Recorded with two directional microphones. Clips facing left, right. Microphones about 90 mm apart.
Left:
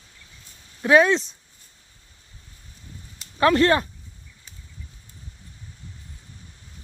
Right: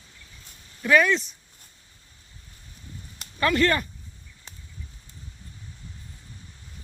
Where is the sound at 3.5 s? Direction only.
35° left (ahead or behind).